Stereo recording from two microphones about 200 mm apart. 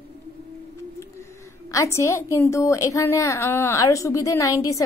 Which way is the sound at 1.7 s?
15° left (ahead or behind).